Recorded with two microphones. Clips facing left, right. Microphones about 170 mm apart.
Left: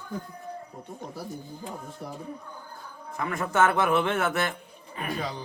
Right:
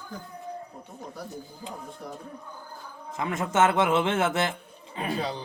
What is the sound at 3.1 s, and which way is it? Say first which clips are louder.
A man's voice: right 1 dB; 20° right (ahead or behind).